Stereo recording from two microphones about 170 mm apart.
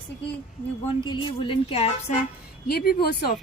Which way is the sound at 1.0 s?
30° left (ahead or behind).